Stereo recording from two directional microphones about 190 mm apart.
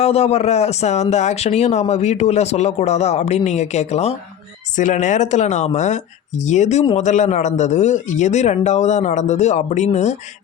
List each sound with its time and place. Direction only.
0.0 s speech: 35° left (ahead or behind)